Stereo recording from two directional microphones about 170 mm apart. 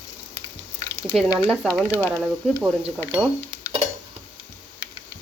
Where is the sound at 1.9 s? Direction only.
10° left (ahead or behind).